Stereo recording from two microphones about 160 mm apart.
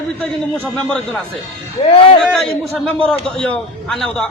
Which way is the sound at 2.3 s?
5° left (ahead or behind).